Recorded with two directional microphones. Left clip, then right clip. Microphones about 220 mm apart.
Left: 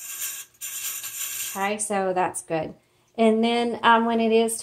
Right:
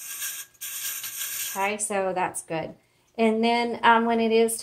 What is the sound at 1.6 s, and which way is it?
A woman's voice, 35° left (ahead or behind).